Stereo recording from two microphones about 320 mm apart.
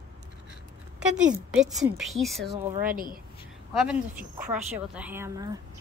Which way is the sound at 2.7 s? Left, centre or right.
Right.